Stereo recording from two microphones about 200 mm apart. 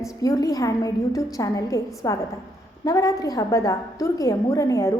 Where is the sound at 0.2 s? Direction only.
15° left (ahead or behind).